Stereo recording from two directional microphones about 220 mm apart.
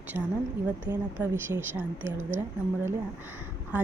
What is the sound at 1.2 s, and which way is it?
Speech, 10° right (ahead or behind).